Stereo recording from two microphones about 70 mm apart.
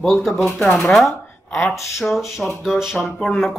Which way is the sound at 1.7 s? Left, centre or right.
Centre.